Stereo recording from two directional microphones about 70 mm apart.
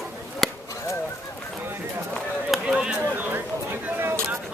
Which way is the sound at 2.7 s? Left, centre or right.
Centre.